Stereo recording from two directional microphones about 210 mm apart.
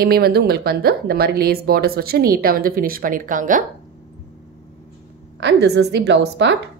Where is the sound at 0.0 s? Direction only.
45° right (ahead or behind).